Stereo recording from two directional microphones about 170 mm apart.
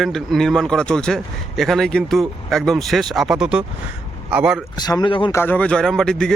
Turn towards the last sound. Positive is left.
turn(degrees=5)  # may be behind; listen again after turning